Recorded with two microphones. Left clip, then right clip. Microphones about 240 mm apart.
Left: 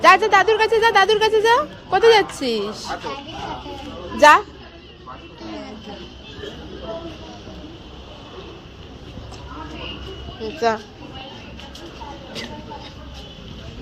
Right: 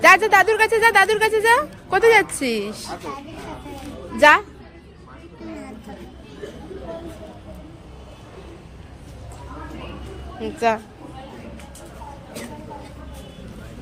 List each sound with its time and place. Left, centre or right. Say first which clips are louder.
0.0 s speech: even; centre
4.2 s speech: left 2 dB; centre
10.4 s speech: even; centre